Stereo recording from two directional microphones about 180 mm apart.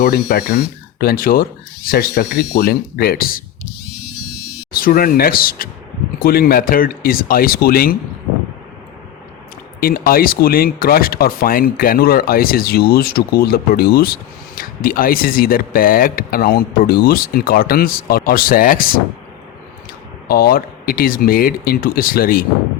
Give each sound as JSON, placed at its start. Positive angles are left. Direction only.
{"t": 0.0, "sound": "speech", "side_deg": 60}
{"t": 4.8, "sound": "speech", "side_deg": 50}
{"t": 9.8, "sound": "speech", "side_deg": 55}
{"t": 20.2, "sound": "speech", "side_deg": 60}